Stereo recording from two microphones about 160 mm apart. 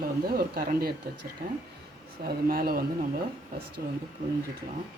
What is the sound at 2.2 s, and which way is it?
Speech, 70° right (ahead or behind).